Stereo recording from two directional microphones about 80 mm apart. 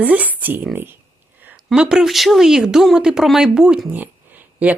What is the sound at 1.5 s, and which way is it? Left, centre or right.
Speech, centre.